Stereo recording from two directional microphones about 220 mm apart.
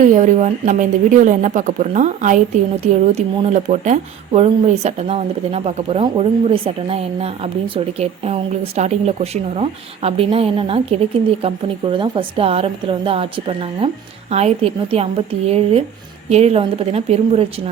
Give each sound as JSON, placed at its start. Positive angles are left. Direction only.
{"t": 0.2, "sound": "a woman's voice", "side_deg": -35}